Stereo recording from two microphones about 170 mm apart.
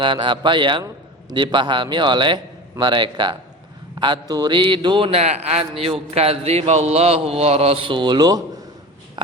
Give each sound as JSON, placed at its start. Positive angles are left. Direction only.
{"t": 0.0, "sound": "a man's voice", "side_deg": -25}